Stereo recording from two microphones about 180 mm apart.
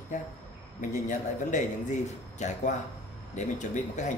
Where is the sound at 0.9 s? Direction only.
45° left (ahead or behind).